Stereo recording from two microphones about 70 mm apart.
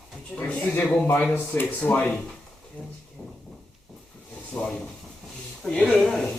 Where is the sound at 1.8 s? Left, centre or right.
Centre.